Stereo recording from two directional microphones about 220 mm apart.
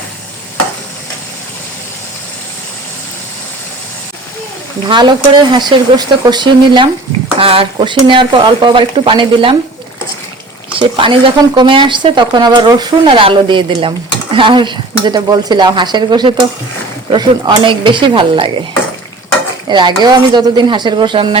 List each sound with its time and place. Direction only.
4.9 s speech: 20° right (ahead or behind)
10.8 s speech: 25° right (ahead or behind)
19.6 s speech: 20° right (ahead or behind)